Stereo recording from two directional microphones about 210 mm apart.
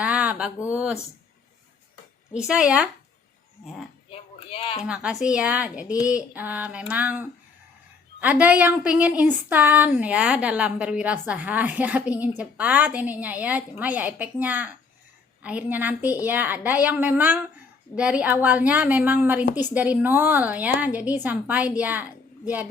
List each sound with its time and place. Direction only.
0.0 s a sound: 5° right (ahead or behind)
0.7 s a woman's voice: 5° right (ahead or behind)
2.3 s a woman's voice: 5° right (ahead or behind)
4.1 s speech: 30° left (ahead or behind)
4.9 s a woman's voice: 5° right (ahead or behind)